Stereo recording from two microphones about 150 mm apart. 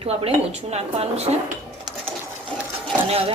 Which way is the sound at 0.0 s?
40° right (ahead or behind).